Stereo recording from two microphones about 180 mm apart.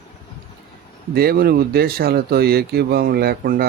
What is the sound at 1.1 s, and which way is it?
Speech, 60° right (ahead or behind).